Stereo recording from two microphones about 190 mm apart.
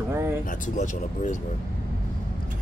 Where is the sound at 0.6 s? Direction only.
40° left (ahead or behind).